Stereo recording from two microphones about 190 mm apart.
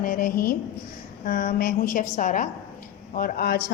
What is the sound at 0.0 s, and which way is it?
A woman's voice, 45° left (ahead or behind).